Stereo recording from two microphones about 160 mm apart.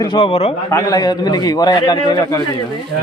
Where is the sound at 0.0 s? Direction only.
30° left (ahead or behind).